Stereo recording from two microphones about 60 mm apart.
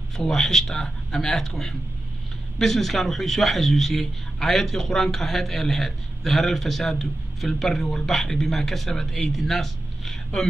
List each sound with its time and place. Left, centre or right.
0.2 s a man's voice: centre